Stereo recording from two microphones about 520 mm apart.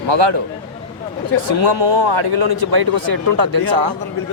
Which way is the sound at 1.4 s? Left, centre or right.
Right.